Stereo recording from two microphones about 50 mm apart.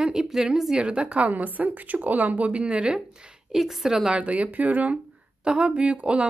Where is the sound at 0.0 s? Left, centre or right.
Centre.